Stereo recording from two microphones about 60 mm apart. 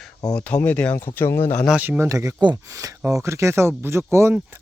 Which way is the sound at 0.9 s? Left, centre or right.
Left.